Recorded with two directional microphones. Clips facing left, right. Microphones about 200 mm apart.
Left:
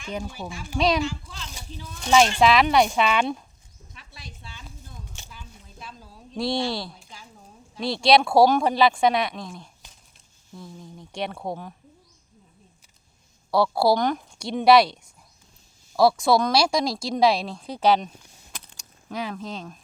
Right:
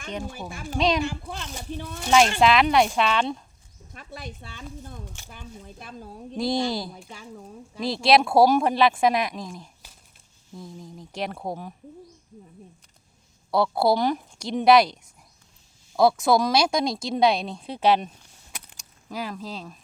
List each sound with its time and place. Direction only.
0.7 s speech: centre (ahead or behind)
1.0 s a woman's voice: 60° right (ahead or behind)
2.0 s speech: centre (ahead or behind)
3.9 s a sound: 55° right (ahead or behind)
6.3 s speech: centre (ahead or behind)
7.1 s speech: 65° right (ahead or behind)
7.8 s speech: centre (ahead or behind)
13.8 s speech: 5° right (ahead or behind)